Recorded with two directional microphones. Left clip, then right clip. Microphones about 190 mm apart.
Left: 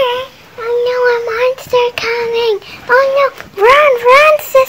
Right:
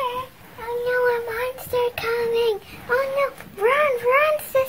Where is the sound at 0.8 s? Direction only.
35° left (ahead or behind).